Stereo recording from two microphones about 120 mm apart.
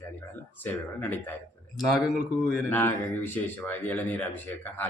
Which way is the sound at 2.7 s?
15° left (ahead or behind).